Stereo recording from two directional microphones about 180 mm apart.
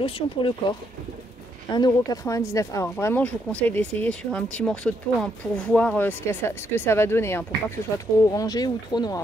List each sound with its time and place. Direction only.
0.0 s speech: 30° left (ahead or behind)